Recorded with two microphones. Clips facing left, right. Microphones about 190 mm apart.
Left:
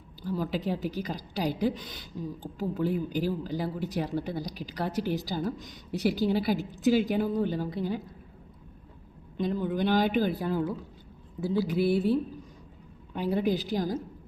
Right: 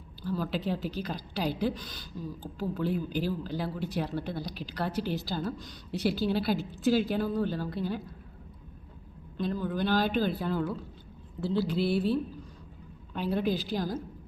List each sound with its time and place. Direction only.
0.2 s speech: 15° left (ahead or behind)
9.4 s speech: 15° left (ahead or behind)